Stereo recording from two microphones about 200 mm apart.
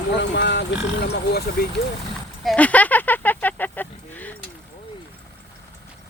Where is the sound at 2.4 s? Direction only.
5° left (ahead or behind).